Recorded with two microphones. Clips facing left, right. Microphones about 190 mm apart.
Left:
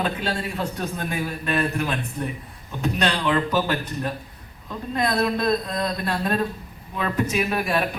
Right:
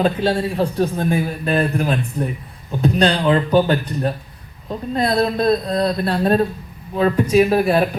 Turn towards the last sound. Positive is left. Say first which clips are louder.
# right 9 dB
turn(degrees=-35)  # may be behind; listen again after turning